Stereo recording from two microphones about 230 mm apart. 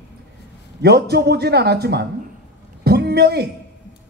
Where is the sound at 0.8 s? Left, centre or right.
Right.